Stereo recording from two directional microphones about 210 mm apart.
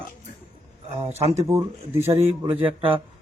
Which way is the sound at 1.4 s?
10° right (ahead or behind).